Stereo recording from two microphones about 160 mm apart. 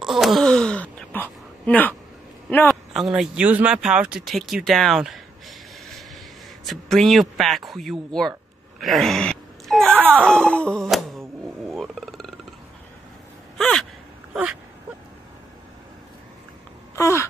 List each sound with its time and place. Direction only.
0.0 s speech: centre (ahead or behind)
2.9 s a man's voice: 5° right (ahead or behind)
9.9 s speech: 10° right (ahead or behind)
10.2 s wail: 5° left (ahead or behind)
11.7 s a sound: centre (ahead or behind)
13.6 s gasp: centre (ahead or behind)
14.3 s speech: 5° right (ahead or behind)
16.9 s babbling: 15° left (ahead or behind)